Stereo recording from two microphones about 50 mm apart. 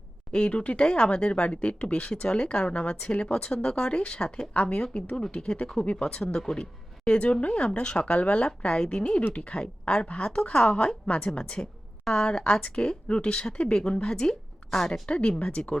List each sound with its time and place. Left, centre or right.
0.3 s speech: left
4.5 s speech: left
5.8 s a woman's voice: left; by 15.0 s centre
15.0 s speech: left